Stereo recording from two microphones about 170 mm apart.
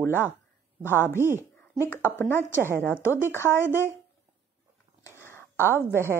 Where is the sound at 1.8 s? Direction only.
15° left (ahead or behind).